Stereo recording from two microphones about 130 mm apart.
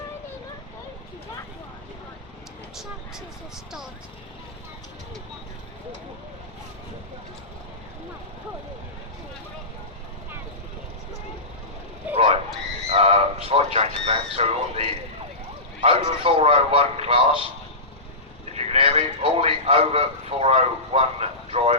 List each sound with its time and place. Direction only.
12.1 s frog: 50° right (ahead or behind)
12.9 s cat: 50° right (ahead or behind)
15.8 s a man's voice: 50° right (ahead or behind)
18.5 s a man's voice: 55° right (ahead or behind)